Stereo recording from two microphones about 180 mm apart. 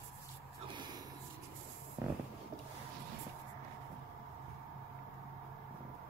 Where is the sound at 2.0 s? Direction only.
15° right (ahead or behind).